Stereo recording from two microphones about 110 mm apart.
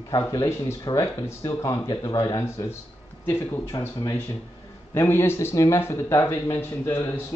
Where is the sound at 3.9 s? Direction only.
30° left (ahead or behind).